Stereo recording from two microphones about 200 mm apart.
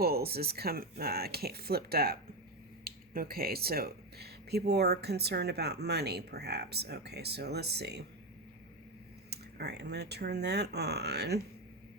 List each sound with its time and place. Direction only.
0.0 s speech: 50° right (ahead or behind)
9.3 s speech: 55° right (ahead or behind)